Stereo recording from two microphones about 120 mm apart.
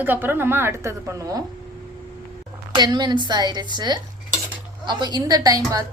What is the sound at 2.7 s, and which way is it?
Speech, 40° right (ahead or behind).